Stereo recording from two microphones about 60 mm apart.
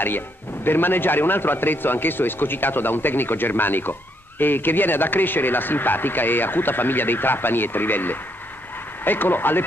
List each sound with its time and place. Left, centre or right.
0.7 s speech: left